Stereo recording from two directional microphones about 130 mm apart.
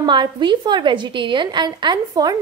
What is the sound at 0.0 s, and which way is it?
A woman's voice, 35° right (ahead or behind).